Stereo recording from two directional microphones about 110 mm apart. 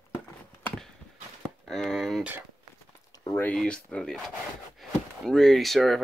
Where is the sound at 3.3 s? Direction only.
15° left (ahead or behind).